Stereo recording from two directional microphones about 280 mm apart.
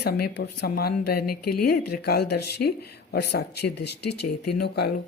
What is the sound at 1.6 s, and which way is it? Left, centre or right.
Speech, left.